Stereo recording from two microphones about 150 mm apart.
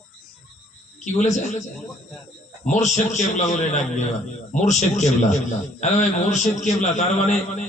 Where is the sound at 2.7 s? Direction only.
50° left (ahead or behind).